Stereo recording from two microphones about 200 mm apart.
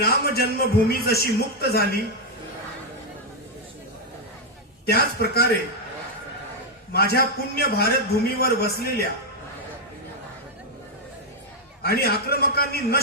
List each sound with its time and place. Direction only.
0.0 s a man's voice: 50° left (ahead or behind)
4.9 s a man's voice: 50° left (ahead or behind)
6.9 s a man's voice: 50° left (ahead or behind)
11.8 s a man's voice: 50° left (ahead or behind)